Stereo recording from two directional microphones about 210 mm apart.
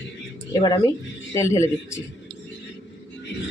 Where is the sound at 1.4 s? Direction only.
15° left (ahead or behind).